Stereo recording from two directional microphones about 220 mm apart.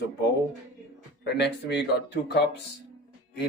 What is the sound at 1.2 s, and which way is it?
Speech, 50° left (ahead or behind).